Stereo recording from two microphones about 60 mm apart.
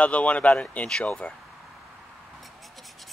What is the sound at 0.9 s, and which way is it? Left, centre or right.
Speech, centre.